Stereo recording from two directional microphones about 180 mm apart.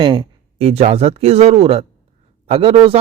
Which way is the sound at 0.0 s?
30° right (ahead or behind).